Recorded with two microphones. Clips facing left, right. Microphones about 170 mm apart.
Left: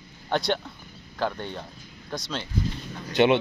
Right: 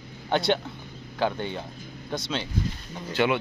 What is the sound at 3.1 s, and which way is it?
Speech, 20° left (ahead or behind).